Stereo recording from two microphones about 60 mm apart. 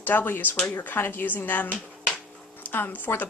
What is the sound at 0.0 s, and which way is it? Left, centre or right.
A woman's voice, left.